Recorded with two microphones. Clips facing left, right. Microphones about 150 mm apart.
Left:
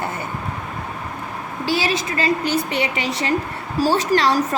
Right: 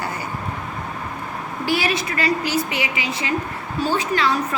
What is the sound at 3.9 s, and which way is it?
Speech, 85° left.